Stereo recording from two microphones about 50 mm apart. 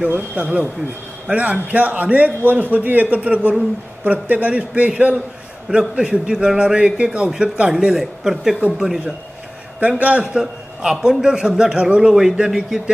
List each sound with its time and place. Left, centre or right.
0.1 s a man's voice: right
5.7 s a man's voice: centre
9.8 s speech: right
10.2 s a man's voice: centre